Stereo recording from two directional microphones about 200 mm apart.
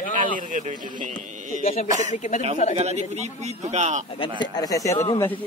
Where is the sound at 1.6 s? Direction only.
35° left (ahead or behind).